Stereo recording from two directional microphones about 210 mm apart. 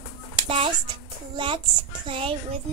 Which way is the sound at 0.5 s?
25° right (ahead or behind).